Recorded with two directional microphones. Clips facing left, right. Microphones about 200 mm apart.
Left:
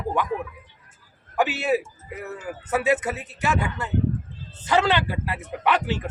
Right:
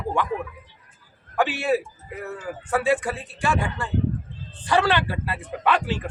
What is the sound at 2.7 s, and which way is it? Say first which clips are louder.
A man's voice: even; 20° left (ahead or behind).